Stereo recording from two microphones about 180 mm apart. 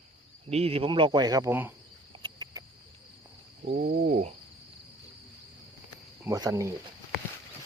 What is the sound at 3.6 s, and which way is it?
Speech, 55° right (ahead or behind).